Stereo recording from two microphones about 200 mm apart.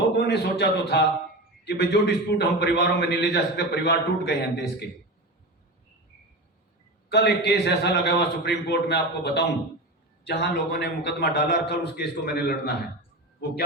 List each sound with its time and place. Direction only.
0.1 s a man's voice: 50° left (ahead or behind)
7.1 s a man's voice: 55° left (ahead or behind)